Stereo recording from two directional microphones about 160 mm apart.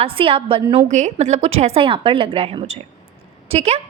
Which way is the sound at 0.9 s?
50° right (ahead or behind).